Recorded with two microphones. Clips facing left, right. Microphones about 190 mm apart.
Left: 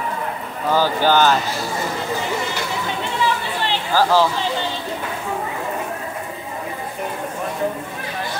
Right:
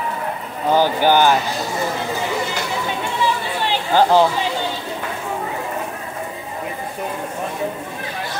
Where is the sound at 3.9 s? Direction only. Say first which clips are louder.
Right 3 dB; 20° right (ahead or behind).